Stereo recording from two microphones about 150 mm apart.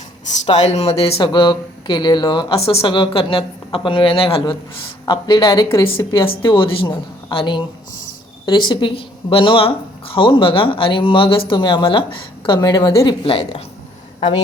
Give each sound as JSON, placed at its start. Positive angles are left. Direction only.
{"t": 0.5, "sound": "speech", "side_deg": 50}
{"t": 2.6, "sound": "speech", "side_deg": 40}
{"t": 6.4, "sound": "a woman's voice", "side_deg": 35}